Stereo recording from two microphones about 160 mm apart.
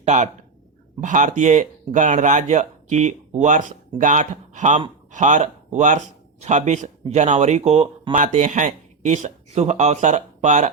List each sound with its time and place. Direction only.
0.0 s speech: 45° right (ahead or behind)